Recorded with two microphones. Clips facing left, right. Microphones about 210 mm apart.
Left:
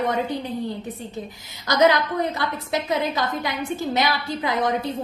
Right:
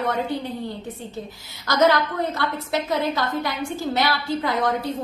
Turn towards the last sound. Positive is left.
turn(degrees=20)  # may be behind; listen again after turning